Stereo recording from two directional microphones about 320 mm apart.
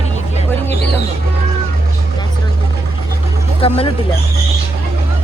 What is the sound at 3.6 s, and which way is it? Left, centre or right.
Speech, centre.